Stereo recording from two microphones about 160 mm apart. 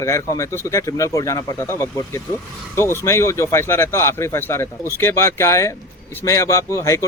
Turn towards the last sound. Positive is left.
turn(degrees=20)  # may be behind; listen again after turning